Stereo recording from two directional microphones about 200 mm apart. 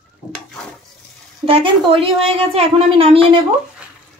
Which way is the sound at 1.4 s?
25° right (ahead or behind).